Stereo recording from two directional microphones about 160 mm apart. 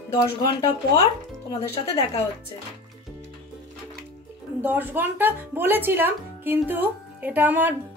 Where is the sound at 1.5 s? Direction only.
35° left (ahead or behind).